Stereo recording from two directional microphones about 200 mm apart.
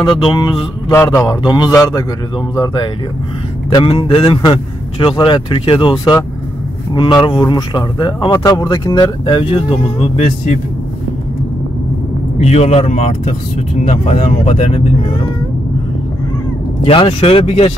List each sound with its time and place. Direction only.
0.0 s speech: 25° left (ahead or behind)
12.4 s speech: 35° left (ahead or behind)
16.8 s speech: 25° left (ahead or behind)